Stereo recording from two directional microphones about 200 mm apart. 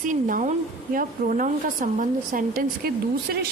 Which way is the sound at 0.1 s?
40° right (ahead or behind).